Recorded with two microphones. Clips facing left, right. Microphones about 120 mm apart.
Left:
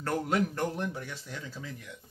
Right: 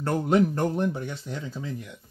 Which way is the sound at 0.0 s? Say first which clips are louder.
Right 7 dB; 25° right (ahead or behind).